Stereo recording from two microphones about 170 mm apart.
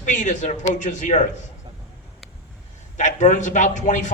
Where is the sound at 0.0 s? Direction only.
50° left (ahead or behind).